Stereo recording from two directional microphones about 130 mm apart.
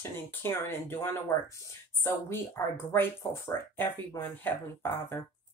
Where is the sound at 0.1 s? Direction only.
20° left (ahead or behind).